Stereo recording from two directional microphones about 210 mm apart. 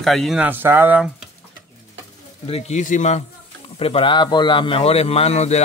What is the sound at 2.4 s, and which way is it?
Speech, 30° left (ahead or behind).